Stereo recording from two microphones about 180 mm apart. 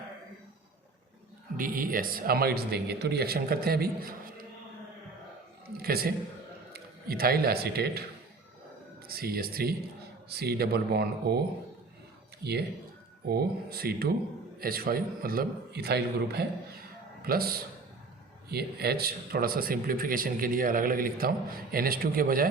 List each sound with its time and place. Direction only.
1.5 s speech: 50° right (ahead or behind)
5.7 s a sound: 60° right (ahead or behind)
6.7 s a man's voice: 55° right (ahead or behind)
9.0 s speech: 55° right (ahead or behind)
13.2 s a man's voice: 60° right (ahead or behind)